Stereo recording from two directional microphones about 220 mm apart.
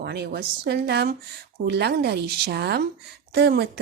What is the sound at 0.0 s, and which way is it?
A woman's voice, 45° right (ahead or behind).